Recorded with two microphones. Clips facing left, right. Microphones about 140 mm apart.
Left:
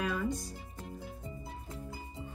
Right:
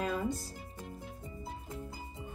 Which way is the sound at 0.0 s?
30° right (ahead or behind).